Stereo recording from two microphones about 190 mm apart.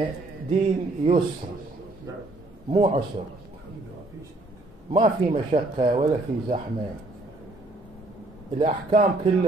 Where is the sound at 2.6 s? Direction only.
30° right (ahead or behind).